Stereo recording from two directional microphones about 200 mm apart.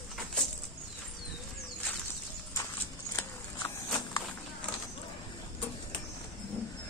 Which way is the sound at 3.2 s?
15° left (ahead or behind).